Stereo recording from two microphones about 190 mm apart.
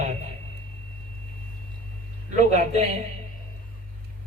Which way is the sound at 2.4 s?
35° right (ahead or behind).